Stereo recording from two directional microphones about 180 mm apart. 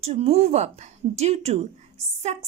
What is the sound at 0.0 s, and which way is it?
A woman's voice, 35° right (ahead or behind).